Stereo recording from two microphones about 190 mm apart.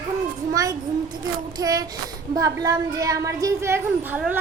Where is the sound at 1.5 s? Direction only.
20° right (ahead or behind).